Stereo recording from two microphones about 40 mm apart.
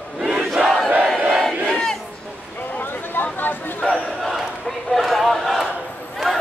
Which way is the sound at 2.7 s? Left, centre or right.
Left.